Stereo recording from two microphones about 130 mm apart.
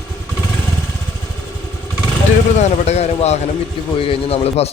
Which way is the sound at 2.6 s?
60° left (ahead or behind).